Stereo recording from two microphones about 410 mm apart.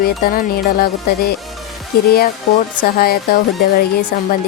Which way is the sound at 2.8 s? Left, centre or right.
Left.